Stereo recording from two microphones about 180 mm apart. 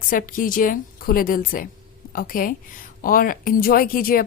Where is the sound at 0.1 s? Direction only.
50° left (ahead or behind).